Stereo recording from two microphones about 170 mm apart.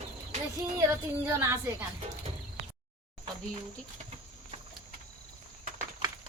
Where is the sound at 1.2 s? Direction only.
15° right (ahead or behind).